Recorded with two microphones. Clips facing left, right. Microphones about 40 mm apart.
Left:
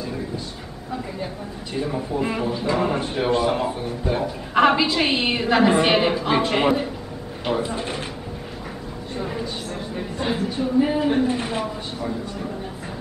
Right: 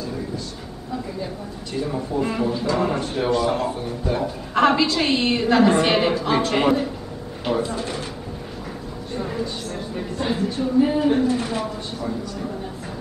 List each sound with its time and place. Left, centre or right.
1.2 s a man's voice: left
7.7 s speech: left
9.2 s a sound: centre
9.9 s a man's voice: centre
11.6 s a man's voice: centre